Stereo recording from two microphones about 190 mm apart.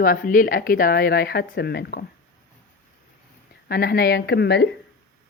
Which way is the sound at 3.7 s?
55° left (ahead or behind).